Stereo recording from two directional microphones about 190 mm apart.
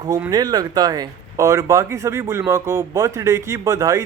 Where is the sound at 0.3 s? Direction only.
20° right (ahead or behind).